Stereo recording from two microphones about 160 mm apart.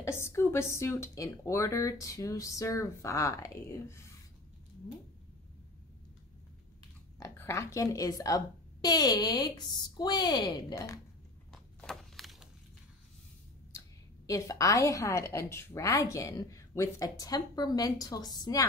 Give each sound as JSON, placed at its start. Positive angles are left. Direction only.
{"t": 0.0, "sound": "a woman's voice", "side_deg": 15}
{"t": 7.2, "sound": "a woman's voice", "side_deg": 15}
{"t": 11.5, "sound": "a sound", "side_deg": 0}
{"t": 13.7, "sound": "a woman's voice", "side_deg": 20}